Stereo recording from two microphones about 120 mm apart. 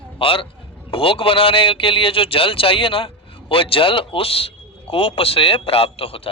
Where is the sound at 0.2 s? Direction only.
50° left (ahead or behind).